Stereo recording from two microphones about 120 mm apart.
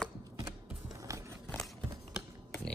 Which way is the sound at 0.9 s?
25° right (ahead or behind).